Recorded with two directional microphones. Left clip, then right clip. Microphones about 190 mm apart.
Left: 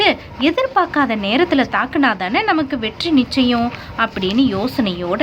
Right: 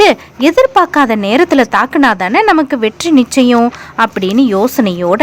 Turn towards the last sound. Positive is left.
turn(degrees=-40)  # may be behind; listen again after turning